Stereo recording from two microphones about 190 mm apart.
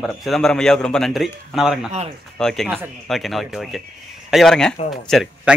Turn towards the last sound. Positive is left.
turn(degrees=0)  # may be behind; listen again after turning